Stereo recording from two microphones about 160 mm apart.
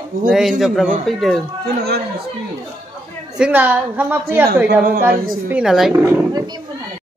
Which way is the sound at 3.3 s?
10° right (ahead or behind).